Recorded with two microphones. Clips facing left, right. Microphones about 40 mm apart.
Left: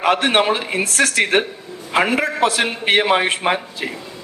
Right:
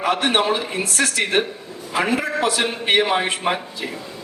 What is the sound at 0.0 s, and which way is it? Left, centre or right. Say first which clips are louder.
A man's voice: left 3 dB; left.